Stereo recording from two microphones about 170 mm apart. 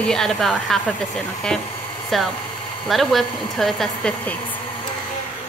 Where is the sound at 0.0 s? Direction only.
5° left (ahead or behind).